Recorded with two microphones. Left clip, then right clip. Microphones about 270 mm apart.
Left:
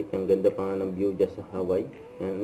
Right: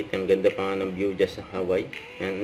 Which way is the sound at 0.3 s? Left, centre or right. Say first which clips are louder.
Right 2 dB; right.